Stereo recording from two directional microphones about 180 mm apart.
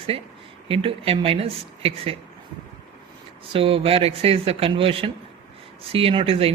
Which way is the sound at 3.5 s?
30° right (ahead or behind).